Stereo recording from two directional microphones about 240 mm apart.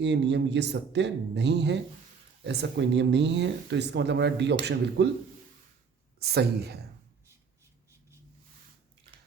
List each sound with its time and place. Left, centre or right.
0.0 s speech: right
6.1 s a woman's voice: right